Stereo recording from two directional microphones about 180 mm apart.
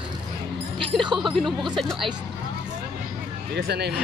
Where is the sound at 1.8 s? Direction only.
Centre (ahead or behind).